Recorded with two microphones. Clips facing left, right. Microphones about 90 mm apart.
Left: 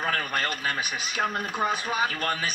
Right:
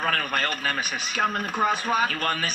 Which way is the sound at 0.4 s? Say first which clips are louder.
Right 2 dB; 40° right (ahead or behind).